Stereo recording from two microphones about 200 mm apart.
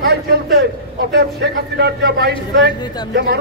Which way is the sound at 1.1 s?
55° right (ahead or behind).